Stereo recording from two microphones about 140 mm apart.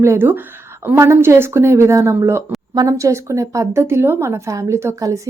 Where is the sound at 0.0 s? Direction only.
20° right (ahead or behind).